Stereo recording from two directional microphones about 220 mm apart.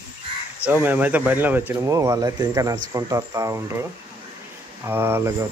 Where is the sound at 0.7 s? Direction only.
10° right (ahead or behind).